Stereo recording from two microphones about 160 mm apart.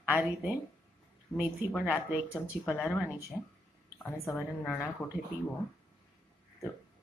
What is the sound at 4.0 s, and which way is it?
Speech, 15° left (ahead or behind).